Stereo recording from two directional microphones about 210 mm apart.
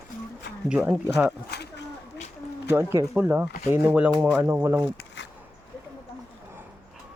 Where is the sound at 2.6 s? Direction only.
10° right (ahead or behind).